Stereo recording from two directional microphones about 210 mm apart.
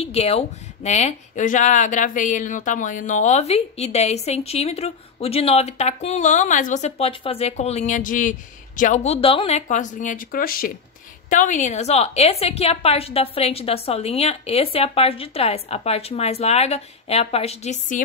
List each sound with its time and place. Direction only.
0.0 s a woman's voice: 30° left (ahead or behind)